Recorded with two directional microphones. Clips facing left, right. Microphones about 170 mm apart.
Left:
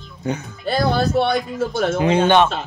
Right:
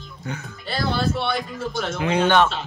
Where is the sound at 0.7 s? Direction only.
45° left (ahead or behind).